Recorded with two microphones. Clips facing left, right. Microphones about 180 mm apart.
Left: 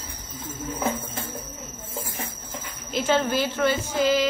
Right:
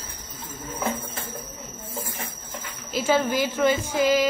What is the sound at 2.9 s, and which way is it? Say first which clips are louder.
A woman's voice: even; 10° right (ahead or behind).